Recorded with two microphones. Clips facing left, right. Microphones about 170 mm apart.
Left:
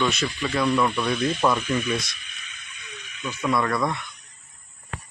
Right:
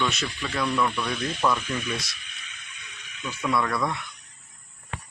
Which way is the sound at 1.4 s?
20° left (ahead or behind).